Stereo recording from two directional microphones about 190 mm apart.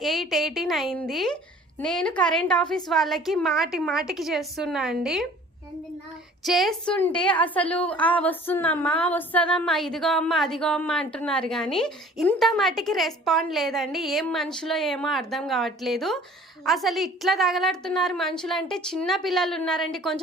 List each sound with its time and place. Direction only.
0.0 s a woman's voice: centre (ahead or behind)
6.4 s a woman's voice: centre (ahead or behind)
7.2 s a sound: 5° left (ahead or behind)
11.1 s a woman's voice: 5° left (ahead or behind)